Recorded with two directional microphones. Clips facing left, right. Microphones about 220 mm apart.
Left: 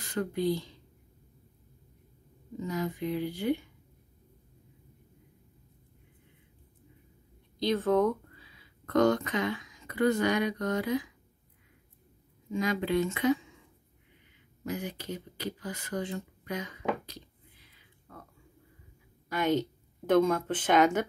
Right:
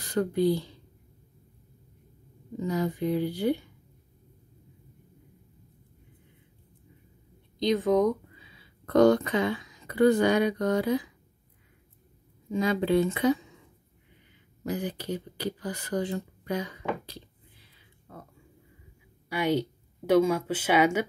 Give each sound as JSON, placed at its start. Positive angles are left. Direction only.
{"t": 0.0, "sound": "a sound", "side_deg": -35}
{"t": 2.6, "sound": "speech", "side_deg": -35}
{"t": 7.5, "sound": "speech", "side_deg": -15}
{"t": 12.4, "sound": "speech", "side_deg": -30}
{"t": 14.6, "sound": "speech", "side_deg": -35}
{"t": 18.1, "sound": "a sound", "side_deg": -25}
{"t": 19.2, "sound": "a woman's voice", "side_deg": -10}